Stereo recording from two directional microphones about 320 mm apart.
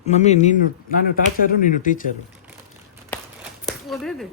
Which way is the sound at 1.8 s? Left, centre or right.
Left.